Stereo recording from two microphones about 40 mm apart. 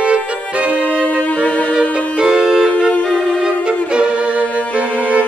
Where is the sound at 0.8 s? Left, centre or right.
Left.